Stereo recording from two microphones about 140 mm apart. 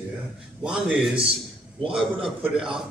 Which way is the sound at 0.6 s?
5° right (ahead or behind).